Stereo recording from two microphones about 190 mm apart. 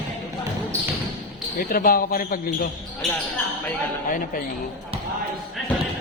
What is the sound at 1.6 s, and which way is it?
A man's voice, 50° left (ahead or behind).